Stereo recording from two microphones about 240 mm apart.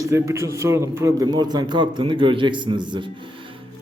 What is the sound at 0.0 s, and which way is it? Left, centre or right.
A man's voice, centre.